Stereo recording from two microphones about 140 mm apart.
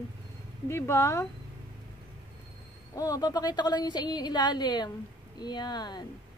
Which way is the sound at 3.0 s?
25° left (ahead or behind).